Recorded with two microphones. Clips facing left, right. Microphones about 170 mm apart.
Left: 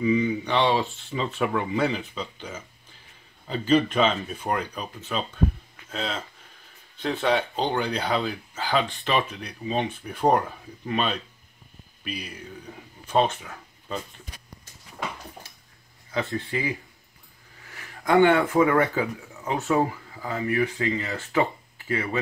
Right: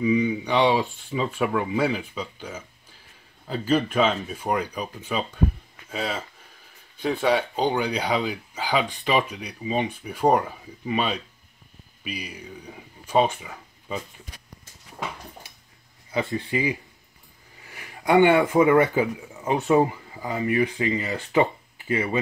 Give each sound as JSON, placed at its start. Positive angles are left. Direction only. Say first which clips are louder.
{"t": 0.0, "sound": "speech", "louder": "right 1 dB", "side_deg": -5}
{"t": 16.1, "sound": "speech", "louder": "right 2 dB", "side_deg": -10}
{"t": 17.7, "sound": "speech", "louder": "right 1 dB", "side_deg": -15}